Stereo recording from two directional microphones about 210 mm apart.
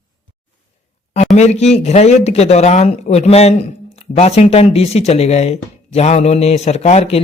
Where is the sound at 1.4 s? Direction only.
30° left (ahead or behind).